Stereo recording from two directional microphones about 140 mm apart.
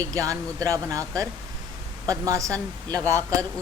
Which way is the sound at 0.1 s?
25° right (ahead or behind).